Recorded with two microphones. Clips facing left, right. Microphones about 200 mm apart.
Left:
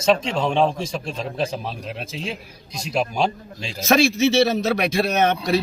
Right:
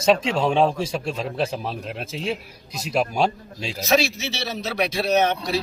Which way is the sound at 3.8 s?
50° left (ahead or behind).